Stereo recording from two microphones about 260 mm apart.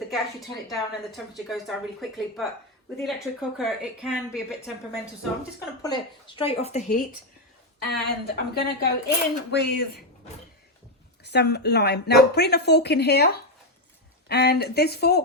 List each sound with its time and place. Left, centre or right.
0.1 s a woman's voice: centre
5.8 s speech: centre
7.9 s speech: left
11.2 s speech: left